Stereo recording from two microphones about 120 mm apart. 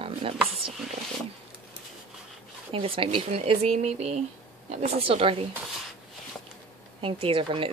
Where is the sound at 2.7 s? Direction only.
50° right (ahead or behind).